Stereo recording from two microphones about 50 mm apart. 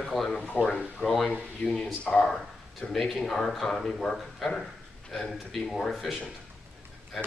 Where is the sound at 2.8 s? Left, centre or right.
Centre.